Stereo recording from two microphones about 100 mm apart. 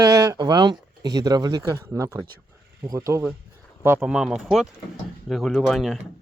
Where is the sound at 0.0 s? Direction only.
35° right (ahead or behind).